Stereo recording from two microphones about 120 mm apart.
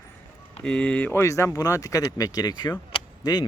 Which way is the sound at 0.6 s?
10° left (ahead or behind).